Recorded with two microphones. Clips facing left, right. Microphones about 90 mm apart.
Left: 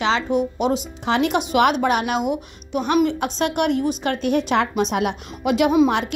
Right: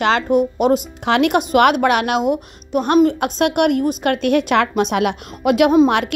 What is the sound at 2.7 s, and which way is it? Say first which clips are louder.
Speech: right 4 dB; 50° right (ahead or behind).